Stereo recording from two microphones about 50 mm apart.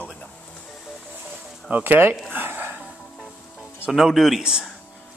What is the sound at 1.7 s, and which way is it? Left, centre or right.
Speech, right.